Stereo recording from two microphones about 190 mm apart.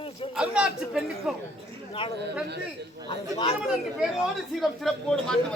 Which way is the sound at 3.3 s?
30° left (ahead or behind).